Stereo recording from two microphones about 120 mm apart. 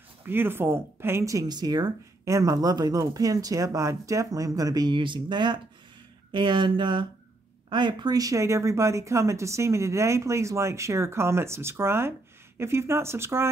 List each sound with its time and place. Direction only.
0.2 s speech: 20° right (ahead or behind)